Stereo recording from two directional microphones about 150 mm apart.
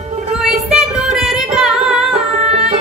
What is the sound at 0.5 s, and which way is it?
Music, centre (ahead or behind).